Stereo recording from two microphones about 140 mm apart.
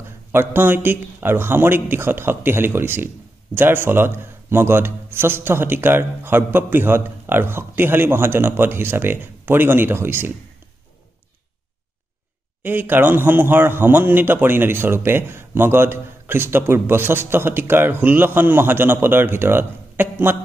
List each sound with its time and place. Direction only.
0.3 s a man's voice: 15° right (ahead or behind)
12.6 s a man's voice: 15° right (ahead or behind)